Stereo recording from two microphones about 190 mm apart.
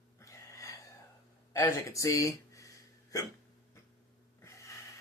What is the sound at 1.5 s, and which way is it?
Speech, 15° left (ahead or behind).